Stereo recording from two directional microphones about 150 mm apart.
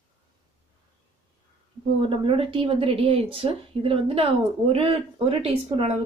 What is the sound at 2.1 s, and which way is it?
Speech, 35° right (ahead or behind).